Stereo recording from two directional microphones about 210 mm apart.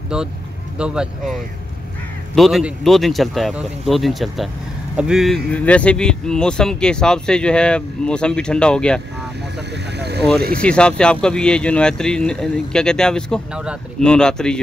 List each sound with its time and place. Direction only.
0.1 s speech: 5° right (ahead or behind)
9.9 s speech: 50° right (ahead or behind)
10.6 s speech: 5° left (ahead or behind)